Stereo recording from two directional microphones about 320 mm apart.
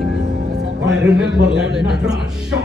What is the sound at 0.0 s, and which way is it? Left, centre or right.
Music, right.